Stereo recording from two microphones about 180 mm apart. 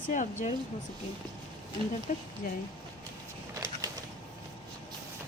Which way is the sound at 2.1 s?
45° left (ahead or behind).